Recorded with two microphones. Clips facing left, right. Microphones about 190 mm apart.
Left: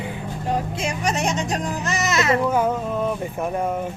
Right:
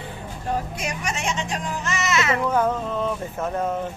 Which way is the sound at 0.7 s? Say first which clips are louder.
Left 5 dB; 30° left (ahead or behind).